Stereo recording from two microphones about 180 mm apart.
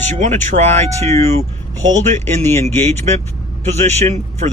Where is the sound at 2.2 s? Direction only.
15° left (ahead or behind).